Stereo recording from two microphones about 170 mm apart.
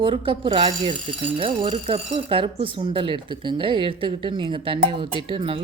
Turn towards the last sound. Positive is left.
turn(degrees=-30)  # may be behind; listen again after turning